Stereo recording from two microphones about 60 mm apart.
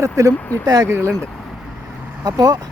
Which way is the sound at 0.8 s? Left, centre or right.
Right.